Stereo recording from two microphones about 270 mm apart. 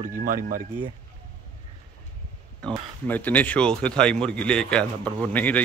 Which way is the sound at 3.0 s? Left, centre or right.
Centre.